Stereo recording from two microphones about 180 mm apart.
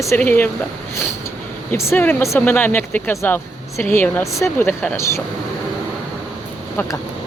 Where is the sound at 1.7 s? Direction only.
15° left (ahead or behind).